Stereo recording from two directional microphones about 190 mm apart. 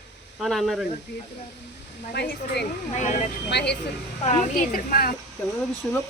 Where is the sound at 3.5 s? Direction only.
60° left (ahead or behind).